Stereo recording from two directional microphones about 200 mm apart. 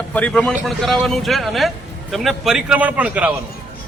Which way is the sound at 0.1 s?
5° left (ahead or behind).